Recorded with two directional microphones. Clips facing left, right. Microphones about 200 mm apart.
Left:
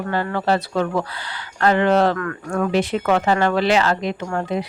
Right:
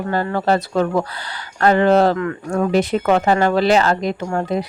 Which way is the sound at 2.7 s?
40° right (ahead or behind).